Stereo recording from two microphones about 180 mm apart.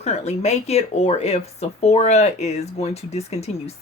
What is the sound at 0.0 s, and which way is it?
Speech, 40° left (ahead or behind).